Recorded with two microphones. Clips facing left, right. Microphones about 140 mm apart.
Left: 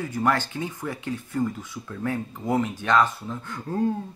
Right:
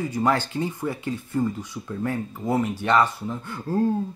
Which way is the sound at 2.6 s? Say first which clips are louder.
Right 2 dB; 15° right (ahead or behind).